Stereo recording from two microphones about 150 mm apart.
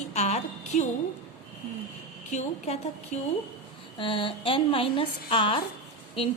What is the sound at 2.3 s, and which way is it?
Speech, 50° left (ahead or behind).